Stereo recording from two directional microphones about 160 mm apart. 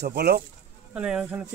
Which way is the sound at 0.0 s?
90° right.